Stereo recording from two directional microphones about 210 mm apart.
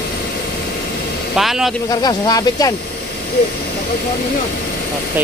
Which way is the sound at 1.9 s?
20° left (ahead or behind).